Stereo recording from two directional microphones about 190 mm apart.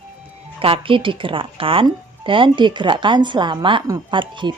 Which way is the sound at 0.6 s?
30° right (ahead or behind).